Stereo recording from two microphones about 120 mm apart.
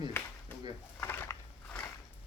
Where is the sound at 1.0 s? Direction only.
20° left (ahead or behind).